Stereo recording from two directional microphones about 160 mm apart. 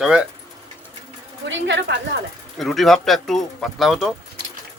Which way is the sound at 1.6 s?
90° right.